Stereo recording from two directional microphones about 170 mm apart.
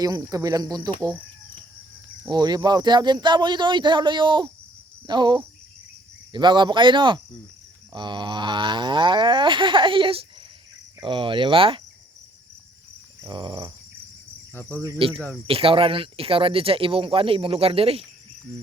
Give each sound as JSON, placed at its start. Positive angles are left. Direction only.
{"t": 0.0, "sound": "speech", "side_deg": -20}
{"t": 2.3, "sound": "speech", "side_deg": -25}
{"t": 13.2, "sound": "speech", "side_deg": -25}
{"t": 14.5, "sound": "cricket", "side_deg": 10}
{"t": 15.4, "sound": "speech", "side_deg": -35}